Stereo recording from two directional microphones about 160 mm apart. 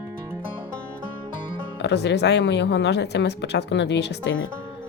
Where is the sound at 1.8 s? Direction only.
90° left.